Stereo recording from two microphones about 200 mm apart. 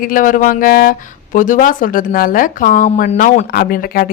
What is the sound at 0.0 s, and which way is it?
A man's voice, 45° left (ahead or behind).